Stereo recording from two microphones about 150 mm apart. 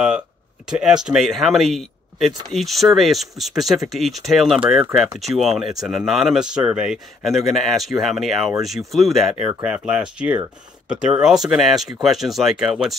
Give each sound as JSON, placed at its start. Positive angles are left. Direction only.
{"t": 0.7, "sound": "speech", "side_deg": -5}